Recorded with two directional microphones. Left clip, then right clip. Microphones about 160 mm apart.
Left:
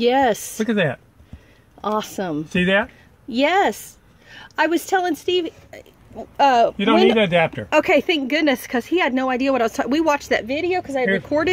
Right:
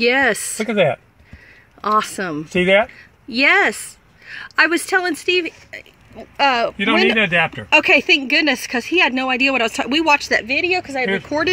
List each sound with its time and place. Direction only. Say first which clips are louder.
0.0 s speech: right 1 dB; 10° left (ahead or behind)
0.7 s speech: right 5 dB; 20° right (ahead or behind)
1.8 s speech: right 5 dB; 5° left (ahead or behind)
7.0 s speech: right 1 dB; 20° right (ahead or behind)
7.7 s speech: right 5 dB; 10° left (ahead or behind)
10.4 s speech: right 4 dB; 25° left (ahead or behind)
11.2 s speech: right 1 dB; 15° left (ahead or behind)